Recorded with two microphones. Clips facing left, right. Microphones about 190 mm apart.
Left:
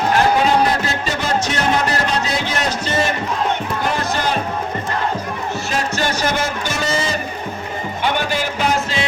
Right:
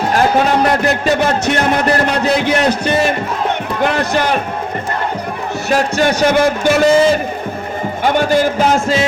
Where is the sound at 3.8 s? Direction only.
65° right (ahead or behind).